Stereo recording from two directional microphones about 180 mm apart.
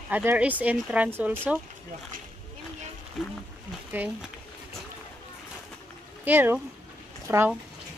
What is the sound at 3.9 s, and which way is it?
Speech, 10° right (ahead or behind).